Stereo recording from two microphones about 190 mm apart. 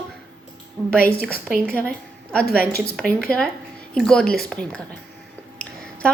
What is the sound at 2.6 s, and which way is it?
Speech, 50° left (ahead or behind).